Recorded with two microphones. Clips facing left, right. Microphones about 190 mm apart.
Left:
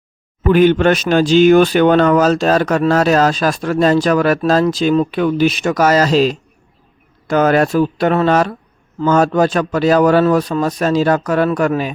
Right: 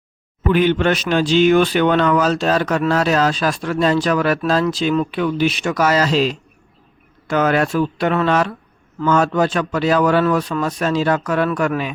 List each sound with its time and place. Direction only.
0.4 s a man's voice: 45° left (ahead or behind)